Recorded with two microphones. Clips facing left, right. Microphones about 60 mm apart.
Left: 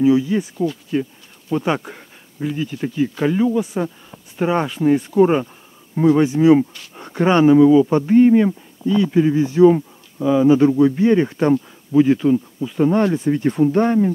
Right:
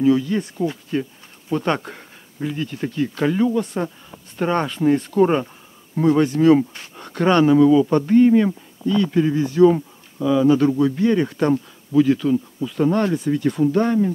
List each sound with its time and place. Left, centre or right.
0.0 s speech: centre
10.7 s speech: centre
11.0 s speech: left